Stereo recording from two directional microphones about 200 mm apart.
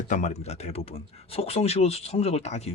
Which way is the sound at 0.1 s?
35° left (ahead or behind).